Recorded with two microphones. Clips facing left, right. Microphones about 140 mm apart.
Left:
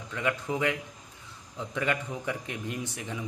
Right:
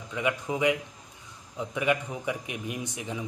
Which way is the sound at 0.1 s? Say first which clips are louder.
Right 1 dB; 15° right (ahead or behind).